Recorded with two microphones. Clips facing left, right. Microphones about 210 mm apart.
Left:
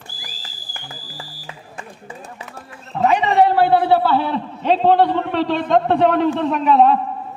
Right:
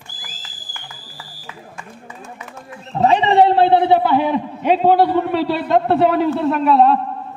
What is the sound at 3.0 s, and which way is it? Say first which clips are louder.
A man's voice: right 2 dB; 30° right (ahead or behind).